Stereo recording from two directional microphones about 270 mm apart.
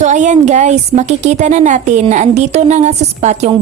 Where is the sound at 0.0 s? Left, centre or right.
Right.